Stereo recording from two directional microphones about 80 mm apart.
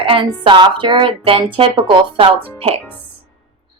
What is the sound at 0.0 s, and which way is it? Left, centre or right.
Speech, right.